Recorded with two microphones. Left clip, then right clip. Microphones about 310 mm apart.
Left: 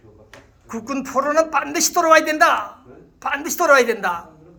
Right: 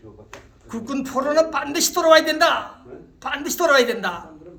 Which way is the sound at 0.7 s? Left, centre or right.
Centre.